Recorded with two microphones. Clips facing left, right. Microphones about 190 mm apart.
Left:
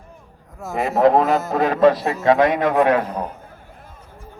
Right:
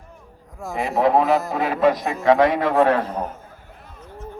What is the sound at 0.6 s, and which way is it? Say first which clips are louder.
A man's voice: left 4 dB; centre (ahead or behind).